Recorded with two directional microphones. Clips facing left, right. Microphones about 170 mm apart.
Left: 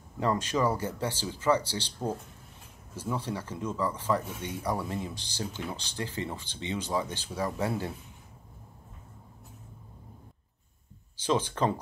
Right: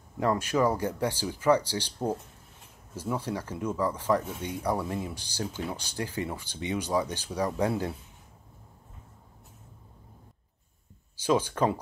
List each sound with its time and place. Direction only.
0.2 s speech: 10° right (ahead or behind)
11.2 s speech: 10° right (ahead or behind)